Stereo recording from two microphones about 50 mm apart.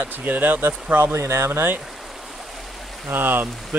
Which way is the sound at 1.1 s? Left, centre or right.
Right.